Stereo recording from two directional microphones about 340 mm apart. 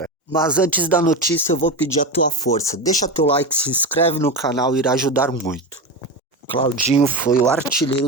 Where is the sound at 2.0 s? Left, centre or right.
Centre.